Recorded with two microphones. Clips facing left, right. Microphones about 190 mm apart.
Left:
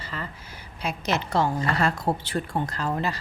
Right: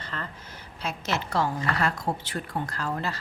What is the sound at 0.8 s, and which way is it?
A woman's voice, 15° left (ahead or behind).